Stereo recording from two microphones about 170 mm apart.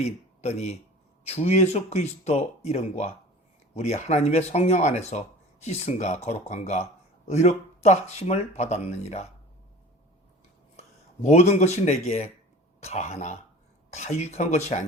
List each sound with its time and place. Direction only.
0.0 s a man's voice: 40° left (ahead or behind)
10.8 s speech: 40° left (ahead or behind)